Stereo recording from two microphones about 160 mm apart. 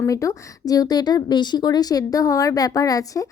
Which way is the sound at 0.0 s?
20° left (ahead or behind).